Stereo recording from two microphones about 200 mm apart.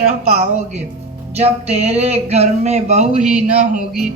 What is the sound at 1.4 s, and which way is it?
Speech, 30° right (ahead or behind).